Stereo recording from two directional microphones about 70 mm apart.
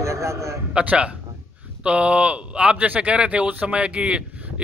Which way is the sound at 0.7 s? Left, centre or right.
Centre.